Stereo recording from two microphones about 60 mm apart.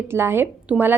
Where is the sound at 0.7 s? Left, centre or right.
Right.